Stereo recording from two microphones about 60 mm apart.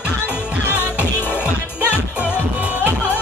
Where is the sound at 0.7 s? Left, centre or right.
Left.